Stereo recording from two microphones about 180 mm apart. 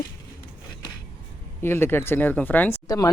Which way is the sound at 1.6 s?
10° left (ahead or behind).